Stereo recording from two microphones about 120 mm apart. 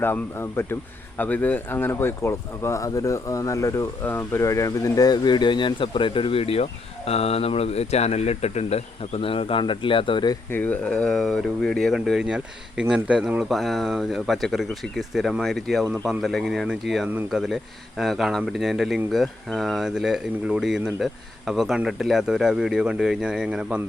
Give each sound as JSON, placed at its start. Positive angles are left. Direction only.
{"t": 0.0, "sound": "speech", "side_deg": 20}
{"t": 10.5, "sound": "speech", "side_deg": 15}